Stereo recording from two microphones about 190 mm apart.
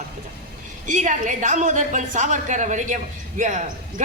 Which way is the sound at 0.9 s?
40° right (ahead or behind).